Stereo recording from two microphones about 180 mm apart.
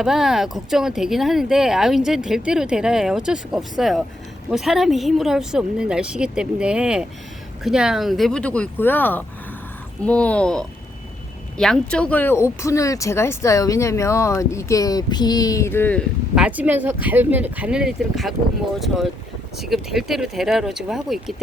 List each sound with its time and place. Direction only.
0.0 s speech: centre (ahead or behind)
16.3 s speech: 5° right (ahead or behind)